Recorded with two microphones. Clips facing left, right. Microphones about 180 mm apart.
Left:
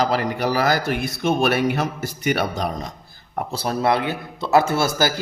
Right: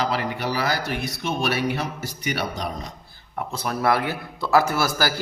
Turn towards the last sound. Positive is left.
turn(degrees=25)  # may be behind; listen again after turning